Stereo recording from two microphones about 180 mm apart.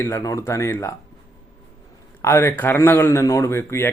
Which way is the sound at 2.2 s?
15° left (ahead or behind).